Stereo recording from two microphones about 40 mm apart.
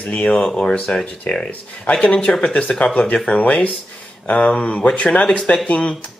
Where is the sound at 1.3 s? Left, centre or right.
Left.